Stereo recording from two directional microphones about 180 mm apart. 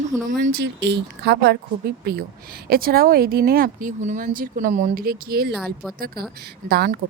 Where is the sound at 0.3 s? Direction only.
50° right (ahead or behind).